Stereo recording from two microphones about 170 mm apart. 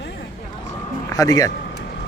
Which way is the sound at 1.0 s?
20° left (ahead or behind).